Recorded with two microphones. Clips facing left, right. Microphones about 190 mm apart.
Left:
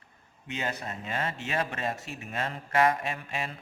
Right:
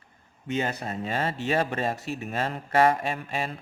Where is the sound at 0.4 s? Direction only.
45° right (ahead or behind).